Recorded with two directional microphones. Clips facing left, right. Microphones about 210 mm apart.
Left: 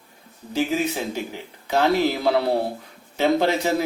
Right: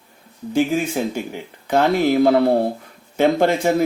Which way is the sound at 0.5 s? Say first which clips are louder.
Right 4 dB; 50° right (ahead or behind).